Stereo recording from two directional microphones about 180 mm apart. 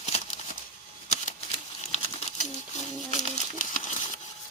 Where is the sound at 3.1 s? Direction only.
40° left (ahead or behind).